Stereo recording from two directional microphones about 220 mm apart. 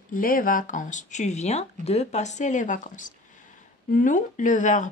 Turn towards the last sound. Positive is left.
turn(degrees=35)  # may be behind; listen again after turning